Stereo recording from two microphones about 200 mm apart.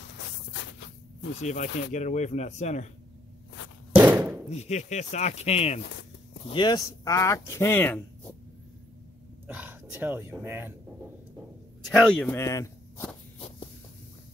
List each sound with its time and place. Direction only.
0.0 s a sound: 65° left (ahead or behind)
1.4 s speech: 40° left (ahead or behind)
3.9 s a sound: 5° right (ahead or behind)
4.5 s speech: 35° left (ahead or behind); by 8.0 s 10° left (ahead or behind)
9.5 s speech: 10° right (ahead or behind)
11.9 s speech: 5° left (ahead or behind)